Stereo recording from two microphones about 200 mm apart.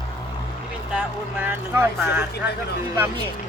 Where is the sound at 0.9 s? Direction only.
10° right (ahead or behind).